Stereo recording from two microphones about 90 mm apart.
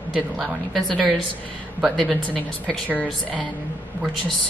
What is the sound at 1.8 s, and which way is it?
Speech, 5° right (ahead or behind).